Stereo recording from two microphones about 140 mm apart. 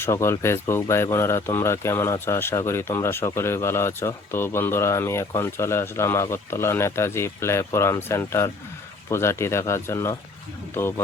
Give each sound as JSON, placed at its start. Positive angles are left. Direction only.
{"t": 0.0, "sound": "speech", "side_deg": 20}